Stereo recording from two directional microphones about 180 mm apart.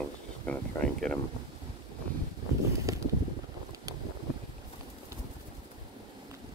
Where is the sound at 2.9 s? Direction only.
20° right (ahead or behind).